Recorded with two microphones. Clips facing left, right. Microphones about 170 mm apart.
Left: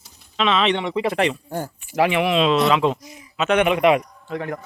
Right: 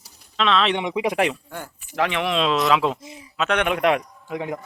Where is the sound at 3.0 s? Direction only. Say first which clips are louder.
Right 2 dB; 25° right (ahead or behind).